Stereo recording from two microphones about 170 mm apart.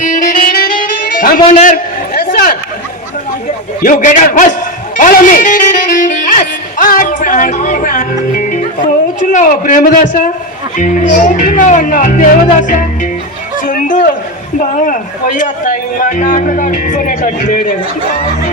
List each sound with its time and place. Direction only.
0.0 s music: 50° left (ahead or behind)
3.8 s speech: 50° left (ahead or behind)
4.9 s music: 50° left (ahead or behind)
8.3 s speech: 50° left (ahead or behind)
13.6 s a sound: 50° left (ahead or behind)
14.6 s a man's voice: 50° left (ahead or behind)